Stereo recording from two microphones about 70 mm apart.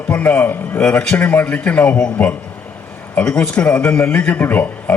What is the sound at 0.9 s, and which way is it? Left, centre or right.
A man's voice, centre.